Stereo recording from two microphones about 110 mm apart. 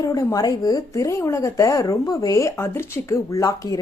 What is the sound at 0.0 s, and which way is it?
Speech, 30° left (ahead or behind).